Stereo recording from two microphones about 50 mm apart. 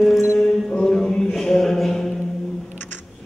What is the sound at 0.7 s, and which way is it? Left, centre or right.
Music, centre.